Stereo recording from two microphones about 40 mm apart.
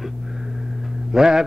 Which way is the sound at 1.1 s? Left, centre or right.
Centre.